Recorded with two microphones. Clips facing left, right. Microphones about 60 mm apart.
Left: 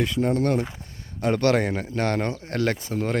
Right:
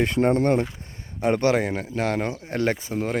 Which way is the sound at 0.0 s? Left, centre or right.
Right.